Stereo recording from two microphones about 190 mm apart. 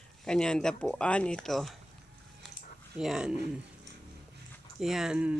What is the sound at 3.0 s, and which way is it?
Speech, 5° right (ahead or behind).